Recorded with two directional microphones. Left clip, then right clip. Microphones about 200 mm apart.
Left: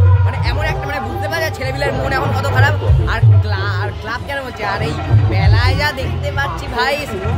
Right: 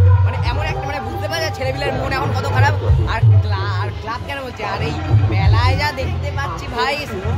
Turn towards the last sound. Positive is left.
turn(degrees=5)  # may be behind; listen again after turning